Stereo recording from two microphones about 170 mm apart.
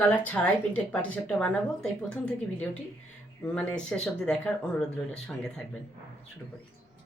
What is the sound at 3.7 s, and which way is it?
Speech, 5° left (ahead or behind).